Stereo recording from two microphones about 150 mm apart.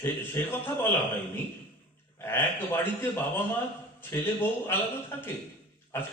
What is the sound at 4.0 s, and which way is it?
A man's voice, 15° left (ahead or behind).